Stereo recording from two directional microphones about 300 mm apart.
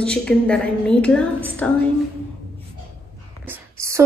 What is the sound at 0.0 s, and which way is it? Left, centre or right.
A woman's voice, centre.